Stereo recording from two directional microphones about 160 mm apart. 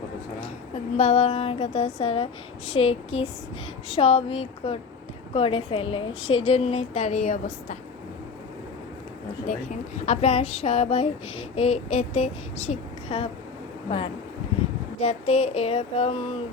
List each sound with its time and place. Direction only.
0.9 s child singing: 40° left (ahead or behind)
10.1 s child singing: 40° left (ahead or behind)
14.9 s child singing: 45° left (ahead or behind)